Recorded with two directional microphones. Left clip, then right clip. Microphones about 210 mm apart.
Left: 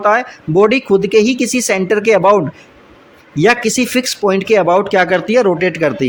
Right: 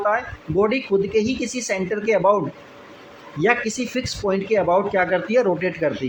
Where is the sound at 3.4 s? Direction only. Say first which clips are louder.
Left 8 dB; 40° left (ahead or behind).